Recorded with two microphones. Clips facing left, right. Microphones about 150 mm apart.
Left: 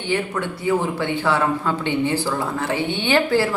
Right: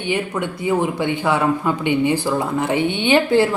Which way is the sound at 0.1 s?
15° right (ahead or behind).